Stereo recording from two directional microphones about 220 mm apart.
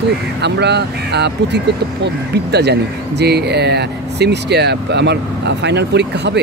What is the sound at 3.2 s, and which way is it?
Speech, 50° right (ahead or behind).